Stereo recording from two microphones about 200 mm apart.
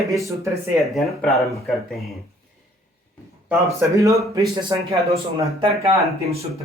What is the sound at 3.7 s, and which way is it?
Speech, 15° right (ahead or behind).